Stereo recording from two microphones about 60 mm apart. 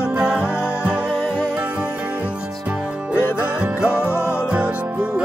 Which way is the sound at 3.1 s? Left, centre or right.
Left.